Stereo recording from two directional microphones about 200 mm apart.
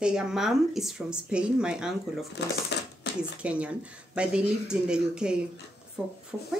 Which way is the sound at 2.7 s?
60° left (ahead or behind).